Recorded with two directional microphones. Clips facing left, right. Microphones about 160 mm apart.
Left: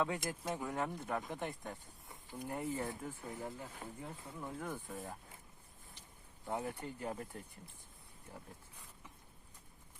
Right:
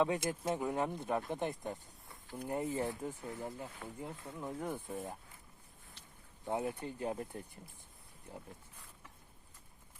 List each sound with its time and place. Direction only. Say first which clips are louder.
0.0 s speech: right 4 dB; 20° right (ahead or behind)
6.4 s speech: right 3 dB; 20° right (ahead or behind)